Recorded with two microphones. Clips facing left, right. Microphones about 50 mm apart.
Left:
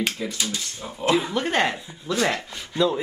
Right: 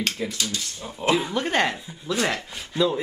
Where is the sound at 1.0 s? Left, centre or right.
Centre.